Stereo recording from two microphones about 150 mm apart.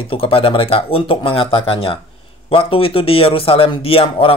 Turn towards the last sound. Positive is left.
turn(degrees=40)  # may be behind; listen again after turning